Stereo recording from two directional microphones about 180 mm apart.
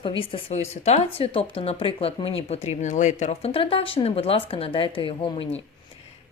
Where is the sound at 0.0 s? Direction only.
30° left (ahead or behind).